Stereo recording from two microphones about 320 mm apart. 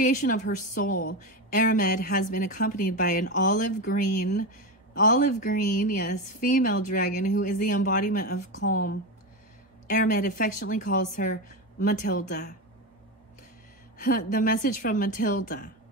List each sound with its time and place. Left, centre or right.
0.0 s a woman's voice: left
9.8 s a woman's voice: left
13.9 s a woman's voice: left